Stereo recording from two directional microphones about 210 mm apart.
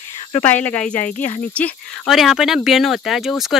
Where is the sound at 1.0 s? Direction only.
40° left (ahead or behind).